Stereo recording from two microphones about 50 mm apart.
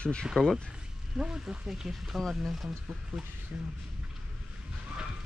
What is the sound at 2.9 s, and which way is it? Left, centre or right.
Speech, centre.